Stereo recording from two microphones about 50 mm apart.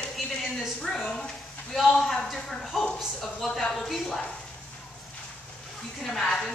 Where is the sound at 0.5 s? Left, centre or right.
Centre.